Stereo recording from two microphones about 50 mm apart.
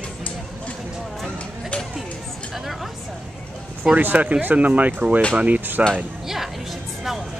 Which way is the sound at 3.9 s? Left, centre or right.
Right.